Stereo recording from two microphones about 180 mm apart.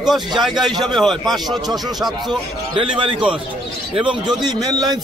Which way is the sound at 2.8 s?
30° right (ahead or behind).